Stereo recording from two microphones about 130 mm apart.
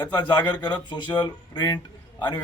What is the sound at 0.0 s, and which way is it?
A man's voice, 35° left (ahead or behind).